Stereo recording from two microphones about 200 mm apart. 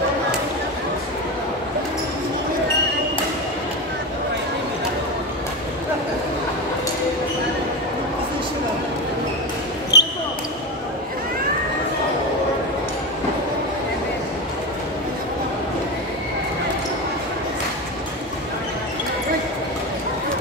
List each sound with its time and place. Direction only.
9.9 s basketball bounce: 55° left (ahead or behind)